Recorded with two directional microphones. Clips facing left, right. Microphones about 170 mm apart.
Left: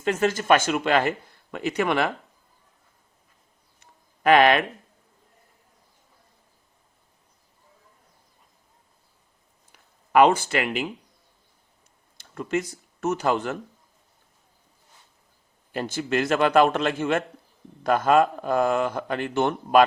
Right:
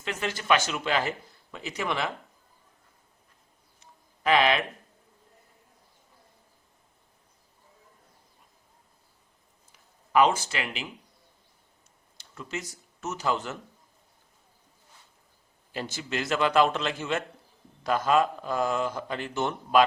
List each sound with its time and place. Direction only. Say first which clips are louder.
0.0 s speech: left 9 dB; 45° left (ahead or behind); by 2.0 s 60° left (ahead or behind)
4.2 s speech: left 6 dB; 60° left (ahead or behind)
10.1 s speech: left 5 dB; 60° left (ahead or behind)
12.1 s speech: left 10 dB; 55° left (ahead or behind)
15.7 s a man's voice: left 7 dB; 55° left (ahead or behind)